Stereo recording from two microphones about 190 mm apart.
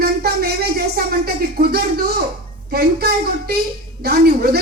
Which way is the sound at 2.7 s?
55° right (ahead or behind).